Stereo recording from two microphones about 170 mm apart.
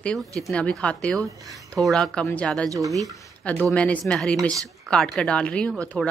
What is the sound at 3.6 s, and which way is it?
A woman's voice, 5° left (ahead or behind).